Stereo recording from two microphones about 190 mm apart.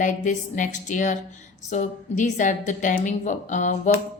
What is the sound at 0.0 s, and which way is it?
A woman's voice, 40° left (ahead or behind).